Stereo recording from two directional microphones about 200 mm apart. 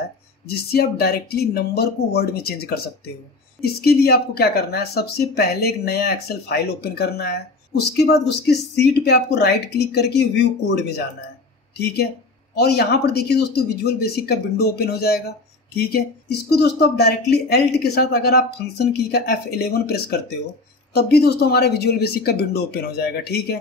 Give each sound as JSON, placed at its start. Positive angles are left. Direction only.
{"t": 0.5, "sound": "speech", "side_deg": 50}